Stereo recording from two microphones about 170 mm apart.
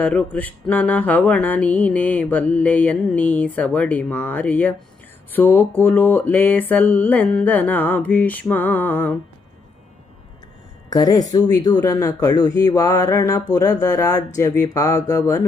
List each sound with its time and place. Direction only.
0.0 s music: 10° left (ahead or behind)
10.8 s speech: 20° left (ahead or behind)